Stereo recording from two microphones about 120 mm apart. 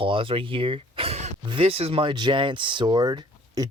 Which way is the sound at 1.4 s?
45° right (ahead or behind).